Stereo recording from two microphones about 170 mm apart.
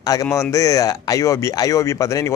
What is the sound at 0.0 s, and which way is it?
Speech, 20° left (ahead or behind).